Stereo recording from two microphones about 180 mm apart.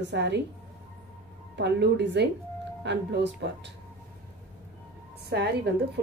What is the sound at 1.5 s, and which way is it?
A woman's voice, 70° right (ahead or behind).